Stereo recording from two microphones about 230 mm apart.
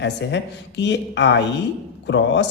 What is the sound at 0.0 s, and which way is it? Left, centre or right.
Speech, left.